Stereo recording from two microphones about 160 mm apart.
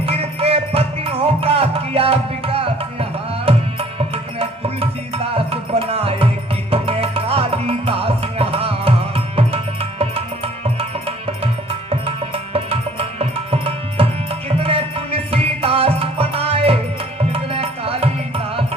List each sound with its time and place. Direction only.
0.0 s music: 40° right (ahead or behind)
11.9 s music: 35° right (ahead or behind)
17.3 s tabla: 35° right (ahead or behind)